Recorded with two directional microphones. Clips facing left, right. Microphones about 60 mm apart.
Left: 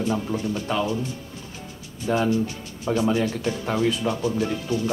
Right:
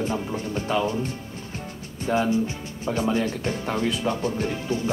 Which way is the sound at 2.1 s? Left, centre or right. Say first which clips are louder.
Even; centre.